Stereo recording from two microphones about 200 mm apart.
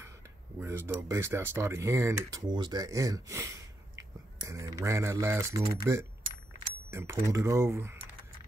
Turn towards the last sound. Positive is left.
turn(degrees=-10)  # may be behind; listen again after turning